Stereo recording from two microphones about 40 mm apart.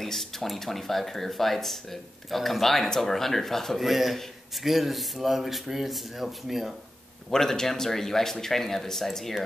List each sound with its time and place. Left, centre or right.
0.0 s speech: centre
3.8 s speech: centre
7.2 s speech: centre